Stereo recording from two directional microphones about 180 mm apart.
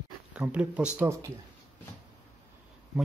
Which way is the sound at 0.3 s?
5° right (ahead or behind).